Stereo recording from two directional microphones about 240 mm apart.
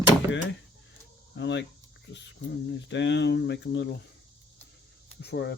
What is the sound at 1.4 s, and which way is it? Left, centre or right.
Speech, left.